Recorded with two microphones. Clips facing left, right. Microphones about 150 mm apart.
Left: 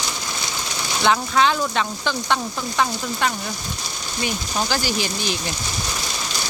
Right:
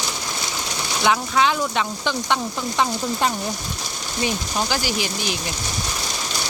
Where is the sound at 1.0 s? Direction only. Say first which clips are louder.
Left 1 dB; 10° right (ahead or behind); by 3.3 s 25° right (ahead or behind).